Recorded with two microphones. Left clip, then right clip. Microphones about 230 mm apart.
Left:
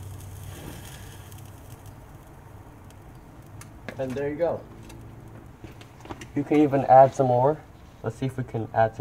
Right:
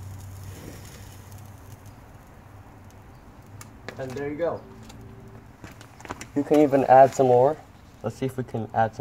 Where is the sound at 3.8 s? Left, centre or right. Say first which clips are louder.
Left 3 dB; centre.